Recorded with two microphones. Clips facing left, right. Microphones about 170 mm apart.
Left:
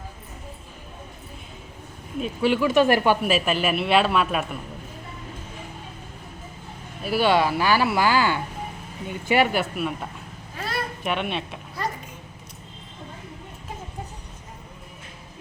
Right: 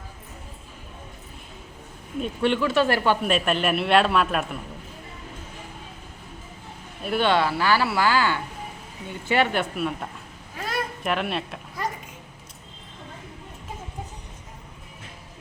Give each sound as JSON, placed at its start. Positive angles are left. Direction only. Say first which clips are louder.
{"t": 2.2, "sound": "speech", "louder": "left 2 dB", "side_deg": 5}
{"t": 3.2, "sound": "a man's voice", "louder": "even", "side_deg": 5}
{"t": 7.0, "sound": "a man's voice", "louder": "left 2 dB", "side_deg": 5}